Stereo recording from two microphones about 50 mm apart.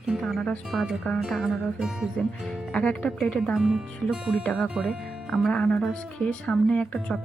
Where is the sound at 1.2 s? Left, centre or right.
Centre.